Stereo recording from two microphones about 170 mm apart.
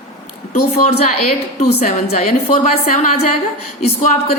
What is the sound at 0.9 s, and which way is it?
A woman's voice, 35° left (ahead or behind).